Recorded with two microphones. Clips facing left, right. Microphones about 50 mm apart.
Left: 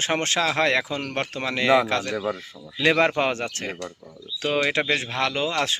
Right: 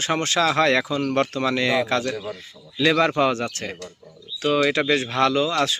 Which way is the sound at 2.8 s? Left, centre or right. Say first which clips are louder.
Right 1 dB; left.